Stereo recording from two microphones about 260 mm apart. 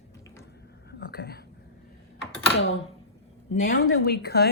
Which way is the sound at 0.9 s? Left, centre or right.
Left.